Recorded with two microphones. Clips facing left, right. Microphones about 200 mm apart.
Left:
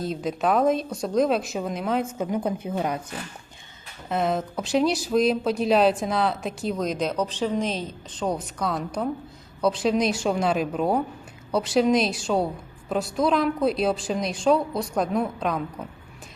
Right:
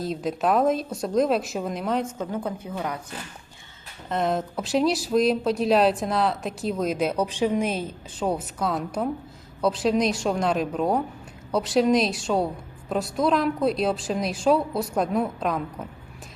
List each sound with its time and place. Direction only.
0.0 s speech: centre (ahead or behind)
2.3 s speech: 20° left (ahead or behind)
4.1 s speech: centre (ahead or behind)